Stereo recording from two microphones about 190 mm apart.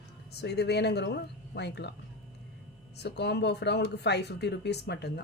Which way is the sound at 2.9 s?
60° left (ahead or behind).